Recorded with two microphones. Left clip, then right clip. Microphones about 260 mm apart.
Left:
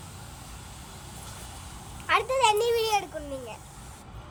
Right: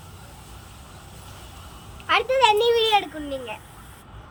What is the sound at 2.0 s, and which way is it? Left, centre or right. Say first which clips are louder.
Speech: right 5 dB; left.